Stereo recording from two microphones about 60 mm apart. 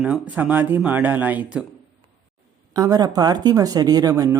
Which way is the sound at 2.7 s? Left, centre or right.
Right.